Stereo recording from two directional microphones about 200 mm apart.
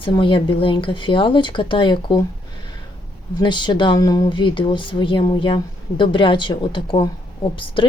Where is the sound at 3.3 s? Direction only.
20° left (ahead or behind).